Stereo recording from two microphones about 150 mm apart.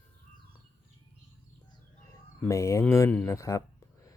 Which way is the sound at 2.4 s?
20° left (ahead or behind).